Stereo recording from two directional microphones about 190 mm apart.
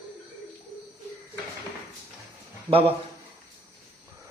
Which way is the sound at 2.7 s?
30° right (ahead or behind).